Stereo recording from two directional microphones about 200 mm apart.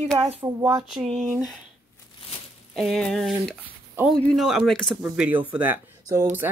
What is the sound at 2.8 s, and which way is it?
Speech, centre (ahead or behind).